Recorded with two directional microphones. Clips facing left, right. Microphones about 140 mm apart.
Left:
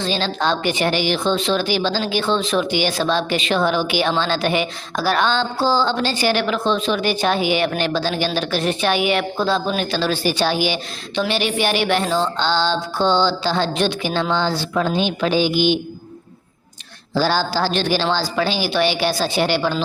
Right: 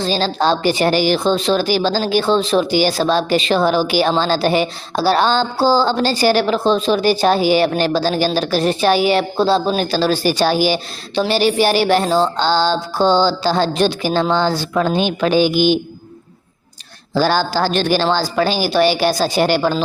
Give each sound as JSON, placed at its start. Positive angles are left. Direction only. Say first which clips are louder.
{"t": 0.0, "sound": "a woman's voice", "louder": "right 4 dB", "side_deg": -35}
{"t": 17.2, "sound": "a woman's voice", "louder": "right 3 dB", "side_deg": -50}